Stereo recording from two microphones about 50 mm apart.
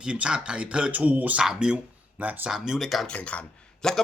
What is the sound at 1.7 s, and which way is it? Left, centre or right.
Speech, right.